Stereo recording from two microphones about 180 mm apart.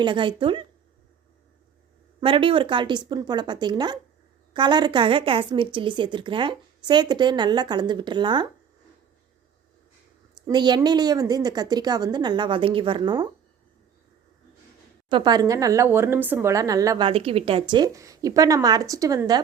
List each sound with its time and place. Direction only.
0.0 s a woman's voice: 25° right (ahead or behind)
2.2 s a woman's voice: 30° right (ahead or behind)
10.4 s a woman's voice: 25° right (ahead or behind)
15.1 s a woman's voice: 25° right (ahead or behind)
17.1 s a woman's voice: 30° right (ahead or behind)